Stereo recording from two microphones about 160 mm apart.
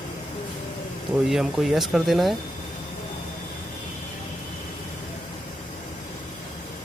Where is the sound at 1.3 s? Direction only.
Centre (ahead or behind).